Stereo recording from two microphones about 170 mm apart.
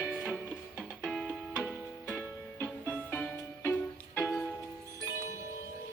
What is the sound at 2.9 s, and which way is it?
Music, 10° left (ahead or behind).